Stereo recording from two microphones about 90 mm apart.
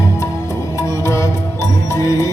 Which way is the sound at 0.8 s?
35° left (ahead or behind).